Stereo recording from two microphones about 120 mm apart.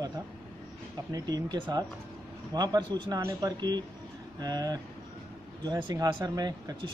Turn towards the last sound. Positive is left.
turn(degrees=-30)  # may be behind; listen again after turning